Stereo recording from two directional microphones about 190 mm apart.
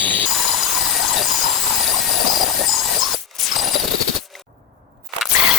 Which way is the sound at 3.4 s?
Centre (ahead or behind).